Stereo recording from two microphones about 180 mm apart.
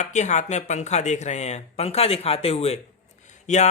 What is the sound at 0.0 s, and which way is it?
Speech, 40° left (ahead or behind).